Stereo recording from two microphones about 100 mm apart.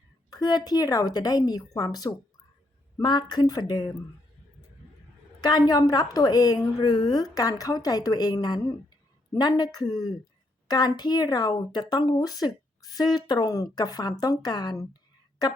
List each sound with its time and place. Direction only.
0.3 s speech: 40° left (ahead or behind)
5.4 s speech: 45° left (ahead or behind)